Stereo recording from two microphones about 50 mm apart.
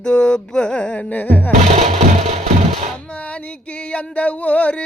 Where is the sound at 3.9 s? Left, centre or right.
Left.